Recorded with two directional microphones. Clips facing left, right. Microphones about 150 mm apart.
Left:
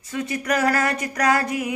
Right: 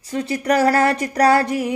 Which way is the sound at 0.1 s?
35° right (ahead or behind).